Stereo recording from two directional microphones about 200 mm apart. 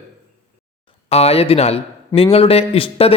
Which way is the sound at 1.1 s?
30° left (ahead or behind).